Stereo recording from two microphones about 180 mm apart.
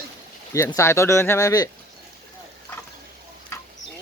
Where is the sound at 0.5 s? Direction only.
15° left (ahead or behind).